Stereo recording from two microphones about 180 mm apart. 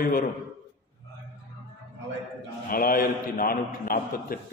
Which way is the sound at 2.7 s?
55° left (ahead or behind).